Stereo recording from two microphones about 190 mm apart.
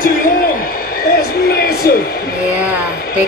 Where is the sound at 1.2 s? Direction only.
55° left (ahead or behind).